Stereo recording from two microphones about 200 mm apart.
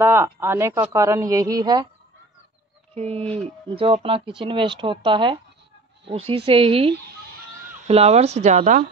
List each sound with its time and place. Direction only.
0.0 s speech: 10° right (ahead or behind)
2.9 s speech: 30° right (ahead or behind)